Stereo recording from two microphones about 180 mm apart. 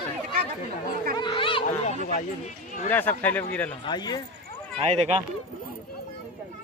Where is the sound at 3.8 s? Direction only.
20° left (ahead or behind).